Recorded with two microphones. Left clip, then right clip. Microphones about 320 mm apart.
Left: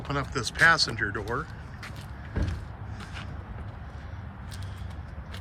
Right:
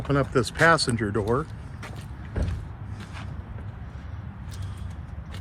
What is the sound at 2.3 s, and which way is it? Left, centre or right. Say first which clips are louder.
Mechanisms: right 1 dB; right.